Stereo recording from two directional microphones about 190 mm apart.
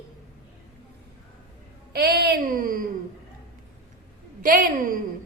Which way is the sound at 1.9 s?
55° right (ahead or behind).